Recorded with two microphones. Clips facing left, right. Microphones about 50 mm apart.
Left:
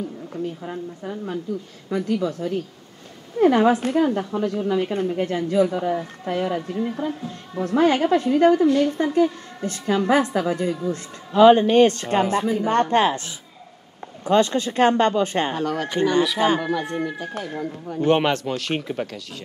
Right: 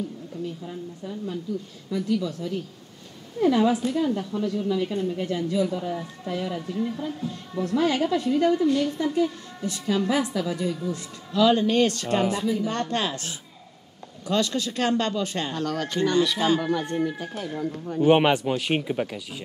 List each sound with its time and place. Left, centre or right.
0.3 s a woman's voice: left
15.5 s speech: centre
16.3 s speech: left
16.6 s speech: centre
18.0 s speech: centre